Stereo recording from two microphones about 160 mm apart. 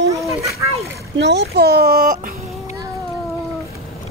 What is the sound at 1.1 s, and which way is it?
A child's voice, 90° right.